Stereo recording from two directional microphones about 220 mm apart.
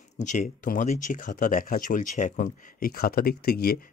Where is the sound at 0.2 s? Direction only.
35° left (ahead or behind).